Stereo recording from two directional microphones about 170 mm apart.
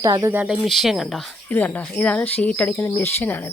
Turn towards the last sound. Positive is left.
turn(degrees=10)  # may be behind; listen again after turning